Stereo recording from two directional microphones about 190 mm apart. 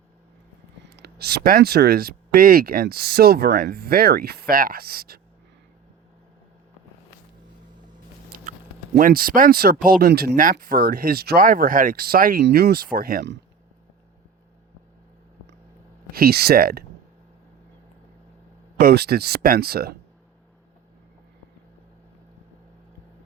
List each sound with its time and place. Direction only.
0.9 s speech: 55° right (ahead or behind)
9.0 s speech: 50° right (ahead or behind)
16.1 s speech: 55° right (ahead or behind)
18.8 s speech: 55° right (ahead or behind)